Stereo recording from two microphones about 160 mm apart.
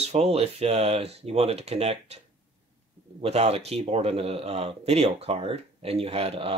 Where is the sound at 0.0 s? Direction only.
40° right (ahead or behind).